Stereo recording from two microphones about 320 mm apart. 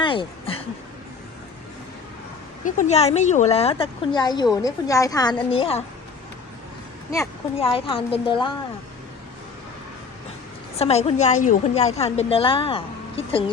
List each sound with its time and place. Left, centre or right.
0.0 s speech: centre
2.6 s a woman's voice: left
7.1 s a woman's voice: centre
10.8 s a woman's voice: centre